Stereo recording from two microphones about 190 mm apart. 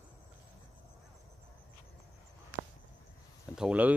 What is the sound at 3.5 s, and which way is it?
Speech, 5° right (ahead or behind).